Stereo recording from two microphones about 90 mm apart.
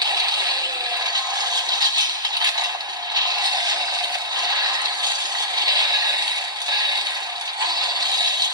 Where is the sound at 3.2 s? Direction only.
50° right (ahead or behind).